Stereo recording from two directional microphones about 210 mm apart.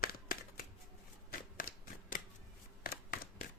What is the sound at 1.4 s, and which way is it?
Shuffling cards, 40° left (ahead or behind).